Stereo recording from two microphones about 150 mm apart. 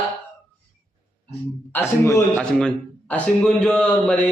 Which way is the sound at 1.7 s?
15° left (ahead or behind).